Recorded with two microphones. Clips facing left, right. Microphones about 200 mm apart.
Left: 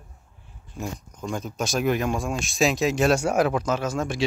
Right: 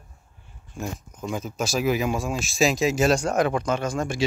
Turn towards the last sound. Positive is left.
turn(degrees=0)  # may be behind; listen again after turning